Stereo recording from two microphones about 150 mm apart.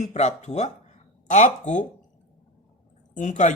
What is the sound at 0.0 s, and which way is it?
Speech, 50° left (ahead or behind).